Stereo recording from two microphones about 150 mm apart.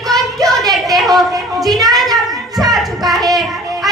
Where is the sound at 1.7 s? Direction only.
25° right (ahead or behind).